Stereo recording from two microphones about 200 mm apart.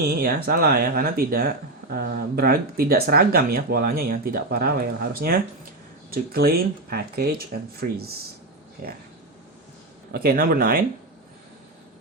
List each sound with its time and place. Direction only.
0.1 s speech: 50° right (ahead or behind)
10.1 s speech: 50° right (ahead or behind)